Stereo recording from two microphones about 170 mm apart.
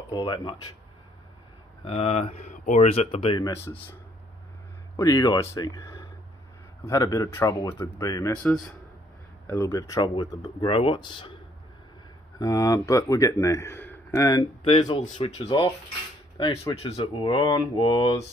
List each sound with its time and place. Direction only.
0.1 s speech: 25° left (ahead or behind)
1.9 s speech: 35° left (ahead or behind)
3.3 s speech: 20° left (ahead or behind)
4.9 s speech: 20° left (ahead or behind)
8.4 s speech: 5° left (ahead or behind)
9.5 s speech: 15° left (ahead or behind)
12.4 s speech: 20° left (ahead or behind)
14.6 s speech: 35° left (ahead or behind)
15.4 s speech: 20° left (ahead or behind)